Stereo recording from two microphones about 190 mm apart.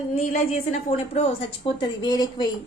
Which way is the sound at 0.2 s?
35° left (ahead or behind).